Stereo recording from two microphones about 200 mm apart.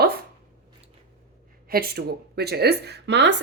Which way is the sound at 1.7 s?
50° right (ahead or behind).